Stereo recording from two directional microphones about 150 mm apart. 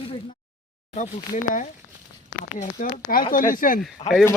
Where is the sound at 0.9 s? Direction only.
55° left (ahead or behind).